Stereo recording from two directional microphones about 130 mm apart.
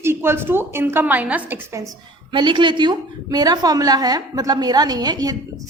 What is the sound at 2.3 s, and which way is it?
A woman's voice, 40° right (ahead or behind).